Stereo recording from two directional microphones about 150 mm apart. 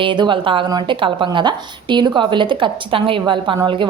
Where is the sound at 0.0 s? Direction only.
30° right (ahead or behind).